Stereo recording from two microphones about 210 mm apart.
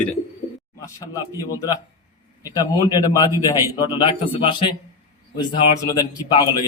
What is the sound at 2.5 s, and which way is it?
A man's voice, 15° left (ahead or behind).